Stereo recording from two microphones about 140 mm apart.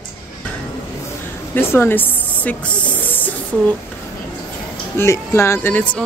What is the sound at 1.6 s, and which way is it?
Snake, 15° left (ahead or behind).